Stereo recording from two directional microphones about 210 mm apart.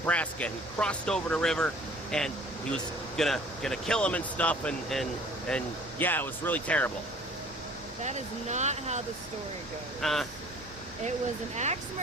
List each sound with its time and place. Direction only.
0.0 s speech: 5° left (ahead or behind)
8.0 s speech: 35° right (ahead or behind)
10.0 s speech: centre (ahead or behind)
11.5 s speech: 30° right (ahead or behind)